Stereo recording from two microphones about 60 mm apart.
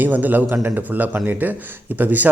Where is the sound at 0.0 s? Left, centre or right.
Right.